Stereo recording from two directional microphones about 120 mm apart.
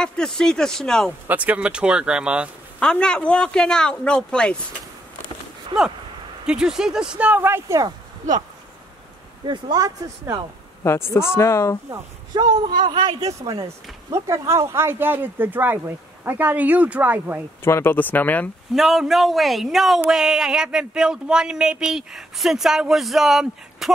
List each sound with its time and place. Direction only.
0.0 s a sound: 5° left (ahead or behind)
1.2 s speech: 15° right (ahead or behind)
2.8 s a man's voice: 5° left (ahead or behind)
6.4 s speech: 5° right (ahead or behind); by 7.9 s 25° right (ahead or behind)
9.4 s speech: 40° right (ahead or behind)
10.8 s speech: 20° left (ahead or behind)
12.4 s speech: 40° right (ahead or behind); by 17.4 s 15° right (ahead or behind)
17.6 s a man's voice: 20° left (ahead or behind)
18.8 s a sound: centre (ahead or behind)